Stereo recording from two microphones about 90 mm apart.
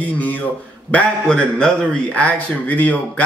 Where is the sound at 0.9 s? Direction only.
10° left (ahead or behind).